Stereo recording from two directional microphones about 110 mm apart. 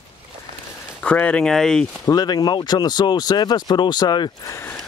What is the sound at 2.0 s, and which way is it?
Speech, 35° left (ahead or behind).